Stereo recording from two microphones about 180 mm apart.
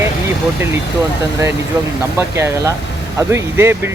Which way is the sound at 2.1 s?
15° right (ahead or behind).